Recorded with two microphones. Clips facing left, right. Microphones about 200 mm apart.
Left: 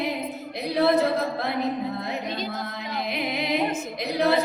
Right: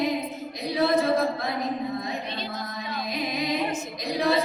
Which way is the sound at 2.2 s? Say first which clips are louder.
Left 3 dB; 45° left (ahead or behind).